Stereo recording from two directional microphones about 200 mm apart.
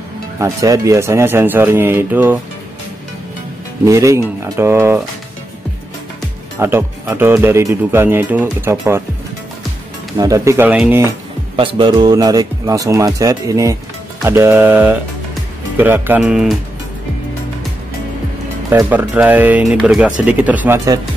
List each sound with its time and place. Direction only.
0.4 s speech: 15° right (ahead or behind)
3.8 s speech: 15° right (ahead or behind)
6.6 s speech: 10° right (ahead or behind)
10.1 s speech: 15° right (ahead or behind)
11.5 s speech: 25° right (ahead or behind); by 16.5 s centre (ahead or behind)
18.7 s speech: 10° right (ahead or behind)